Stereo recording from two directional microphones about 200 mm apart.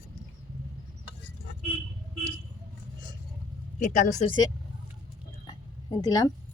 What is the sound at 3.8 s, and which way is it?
Speech, 35° left (ahead or behind).